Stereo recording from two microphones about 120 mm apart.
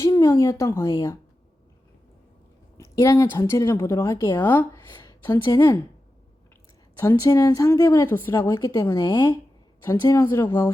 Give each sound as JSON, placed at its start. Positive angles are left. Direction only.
{"t": 0.0, "sound": "speech", "side_deg": 25}
{"t": 2.7, "sound": "speech", "side_deg": 25}
{"t": 7.0, "sound": "speech", "side_deg": 25}